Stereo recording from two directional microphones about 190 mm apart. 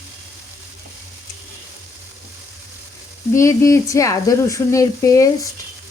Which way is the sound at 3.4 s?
15° left (ahead or behind).